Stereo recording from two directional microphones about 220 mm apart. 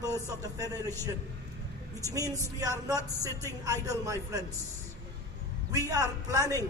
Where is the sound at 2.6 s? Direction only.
15° right (ahead or behind).